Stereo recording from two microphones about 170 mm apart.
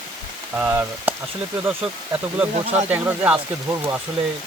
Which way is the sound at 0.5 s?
10° right (ahead or behind).